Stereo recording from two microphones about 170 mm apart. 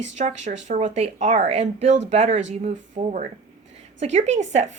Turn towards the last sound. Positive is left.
turn(degrees=-40)  # may be behind; listen again after turning